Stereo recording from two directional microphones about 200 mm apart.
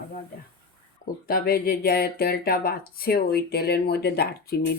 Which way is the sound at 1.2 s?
50° left (ahead or behind).